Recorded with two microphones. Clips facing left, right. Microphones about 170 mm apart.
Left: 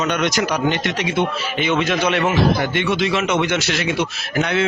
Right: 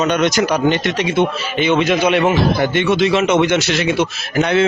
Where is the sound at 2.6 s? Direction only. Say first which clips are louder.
Right 5 dB; 25° right (ahead or behind).